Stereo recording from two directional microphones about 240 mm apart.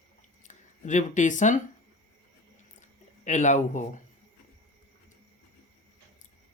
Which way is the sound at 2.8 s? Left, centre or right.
Left.